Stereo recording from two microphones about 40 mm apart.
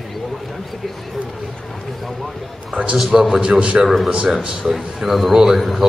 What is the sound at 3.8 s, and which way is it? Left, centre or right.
A man's voice, centre.